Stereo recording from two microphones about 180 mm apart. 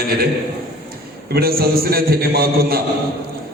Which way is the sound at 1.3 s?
60° right (ahead or behind).